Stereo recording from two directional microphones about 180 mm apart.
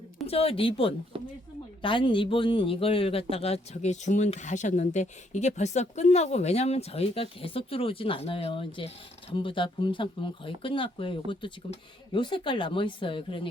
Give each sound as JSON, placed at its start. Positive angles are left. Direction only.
{"t": 0.3, "sound": "a man's voice", "side_deg": 30}